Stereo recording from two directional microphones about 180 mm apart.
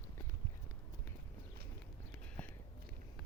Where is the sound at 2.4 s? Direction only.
5° left (ahead or behind).